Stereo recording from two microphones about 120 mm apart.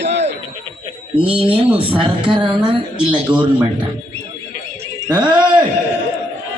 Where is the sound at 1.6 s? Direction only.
10° right (ahead or behind).